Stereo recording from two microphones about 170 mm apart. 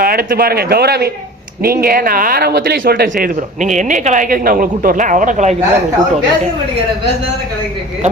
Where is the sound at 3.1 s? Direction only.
50° right (ahead or behind).